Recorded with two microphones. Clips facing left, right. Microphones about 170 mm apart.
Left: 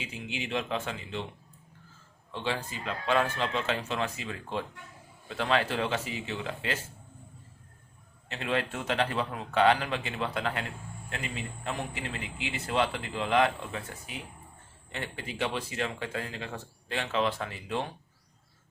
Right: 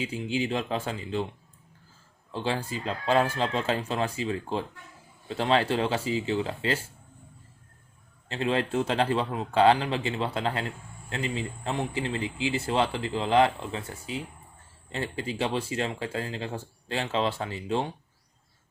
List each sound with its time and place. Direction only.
0.3 s speech: 35° right (ahead or behind)
2.3 s speech: 35° right (ahead or behind)
8.3 s a man's voice: 30° right (ahead or behind)